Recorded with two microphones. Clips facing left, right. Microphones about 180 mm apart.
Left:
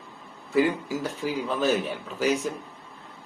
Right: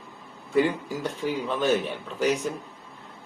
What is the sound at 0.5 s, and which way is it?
Speech, 5° left (ahead or behind).